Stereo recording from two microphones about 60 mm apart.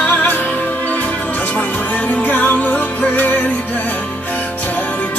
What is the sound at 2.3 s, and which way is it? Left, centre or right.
Music, left.